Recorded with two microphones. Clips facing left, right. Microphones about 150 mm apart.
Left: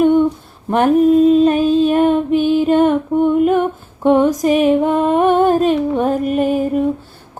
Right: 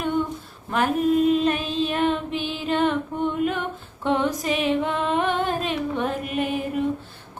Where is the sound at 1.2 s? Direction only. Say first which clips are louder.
Left 10 dB; 35° left (ahead or behind).